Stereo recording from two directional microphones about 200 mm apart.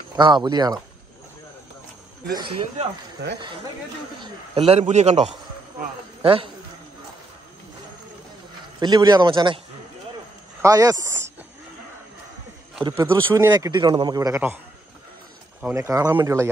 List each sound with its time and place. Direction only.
0.1 s a man's voice: 20° right (ahead or behind)
2.3 s a man's voice: 25° right (ahead or behind)
4.2 s a man's voice: 30° right (ahead or behind)
8.7 s a man's voice: 20° right (ahead or behind)
10.6 s a man's voice: 15° right (ahead or behind)
12.9 s a man's voice: 15° right (ahead or behind)
15.6 s a man's voice: 15° right (ahead or behind)